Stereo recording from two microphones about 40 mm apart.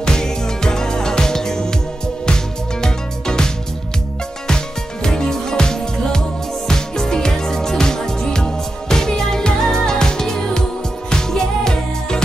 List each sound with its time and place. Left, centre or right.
0.0 s music: centre
2.8 s music: centre
5.0 s music: centre